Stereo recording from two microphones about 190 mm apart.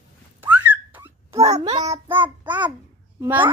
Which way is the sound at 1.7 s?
20° right (ahead or behind).